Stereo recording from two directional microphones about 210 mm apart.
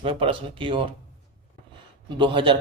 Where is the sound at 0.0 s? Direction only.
25° right (ahead or behind).